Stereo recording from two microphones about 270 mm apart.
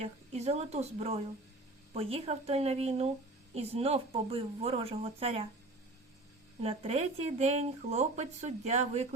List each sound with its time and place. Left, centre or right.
0.0 s speech: right
6.6 s speech: right